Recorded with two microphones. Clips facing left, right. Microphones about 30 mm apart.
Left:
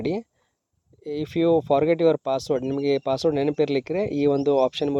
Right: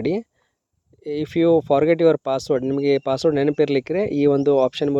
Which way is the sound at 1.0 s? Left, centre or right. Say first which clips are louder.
Right 4 dB; right.